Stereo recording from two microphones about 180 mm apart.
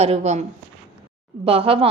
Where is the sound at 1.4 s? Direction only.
30° right (ahead or behind).